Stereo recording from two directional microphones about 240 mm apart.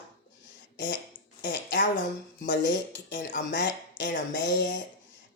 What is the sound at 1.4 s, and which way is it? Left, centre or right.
Speech, left.